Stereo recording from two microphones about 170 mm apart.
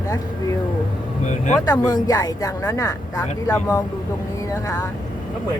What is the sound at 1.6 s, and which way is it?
Speech, 20° left (ahead or behind).